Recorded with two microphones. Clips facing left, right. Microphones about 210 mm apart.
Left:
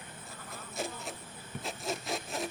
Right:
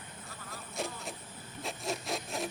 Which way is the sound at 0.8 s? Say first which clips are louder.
Even; centre (ahead or behind).